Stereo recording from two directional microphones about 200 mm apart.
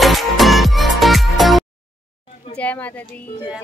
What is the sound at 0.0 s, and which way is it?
Music, centre (ahead or behind).